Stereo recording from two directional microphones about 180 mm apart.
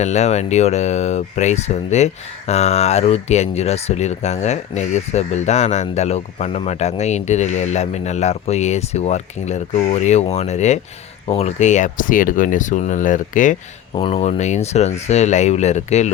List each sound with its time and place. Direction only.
0.0 s speech: 40° left (ahead or behind)
13.9 s speech: 35° left (ahead or behind)